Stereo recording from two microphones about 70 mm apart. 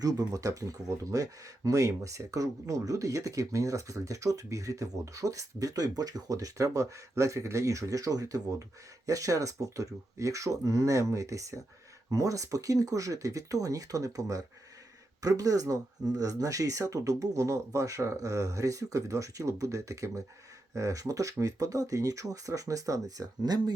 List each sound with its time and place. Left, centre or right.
0.0 s speech: right